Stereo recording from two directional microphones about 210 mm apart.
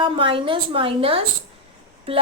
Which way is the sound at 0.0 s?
25° right (ahead or behind).